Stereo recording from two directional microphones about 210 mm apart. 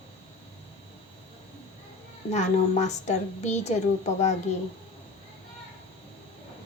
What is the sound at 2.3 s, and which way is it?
A woman's voice, 35° left (ahead or behind).